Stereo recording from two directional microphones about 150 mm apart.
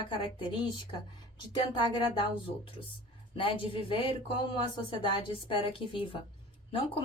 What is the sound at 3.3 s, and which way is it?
Speech, 35° left (ahead or behind).